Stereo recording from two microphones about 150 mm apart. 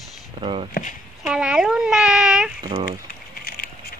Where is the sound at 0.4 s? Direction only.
35° right (ahead or behind).